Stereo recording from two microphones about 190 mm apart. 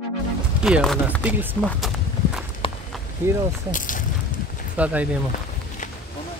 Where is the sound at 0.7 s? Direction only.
5° right (ahead or behind).